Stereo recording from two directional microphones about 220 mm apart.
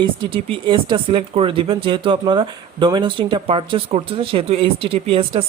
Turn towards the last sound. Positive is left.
turn(degrees=-25)  # may be behind; listen again after turning